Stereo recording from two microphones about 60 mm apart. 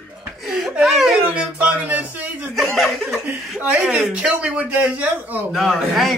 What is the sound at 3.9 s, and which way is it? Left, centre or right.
Speech, right.